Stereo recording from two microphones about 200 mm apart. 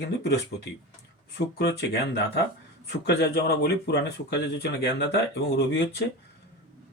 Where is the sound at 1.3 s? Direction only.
55° left (ahead or behind).